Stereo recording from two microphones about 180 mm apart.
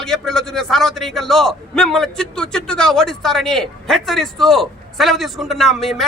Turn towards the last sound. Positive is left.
turn(degrees=0)  # may be behind; listen again after turning